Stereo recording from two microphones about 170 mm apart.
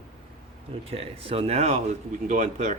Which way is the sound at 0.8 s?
35° right (ahead or behind).